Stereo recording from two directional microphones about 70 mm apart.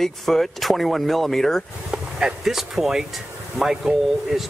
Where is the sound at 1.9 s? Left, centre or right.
Centre.